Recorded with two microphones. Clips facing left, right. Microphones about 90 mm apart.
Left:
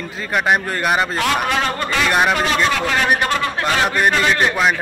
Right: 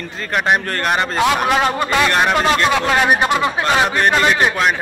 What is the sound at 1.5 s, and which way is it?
Speech, 15° right (ahead or behind).